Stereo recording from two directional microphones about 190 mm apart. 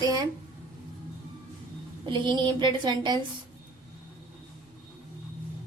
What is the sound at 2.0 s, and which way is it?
A woman's voice, 25° right (ahead or behind).